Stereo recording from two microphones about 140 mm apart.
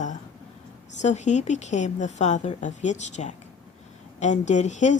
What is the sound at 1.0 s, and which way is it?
Speech, 55° left (ahead or behind).